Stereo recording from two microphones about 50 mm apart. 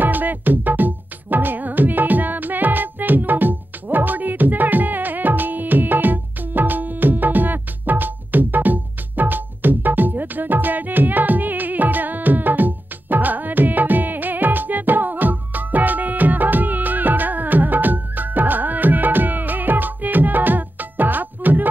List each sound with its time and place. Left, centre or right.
0.0 s music: right